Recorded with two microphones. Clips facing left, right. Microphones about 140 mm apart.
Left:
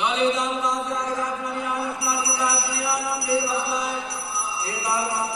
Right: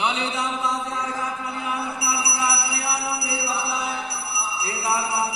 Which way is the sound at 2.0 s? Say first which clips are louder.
Left 1 dB; 65° right (ahead or behind).